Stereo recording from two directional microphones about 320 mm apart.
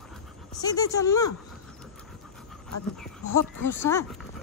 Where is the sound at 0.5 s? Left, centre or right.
Centre.